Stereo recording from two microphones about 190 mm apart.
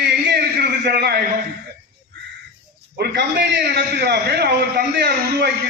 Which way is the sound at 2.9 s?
60° right (ahead or behind).